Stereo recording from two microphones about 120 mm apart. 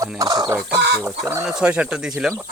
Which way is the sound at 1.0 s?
20° right (ahead or behind).